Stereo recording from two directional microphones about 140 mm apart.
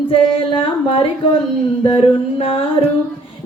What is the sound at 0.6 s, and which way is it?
Music, 40° left (ahead or behind).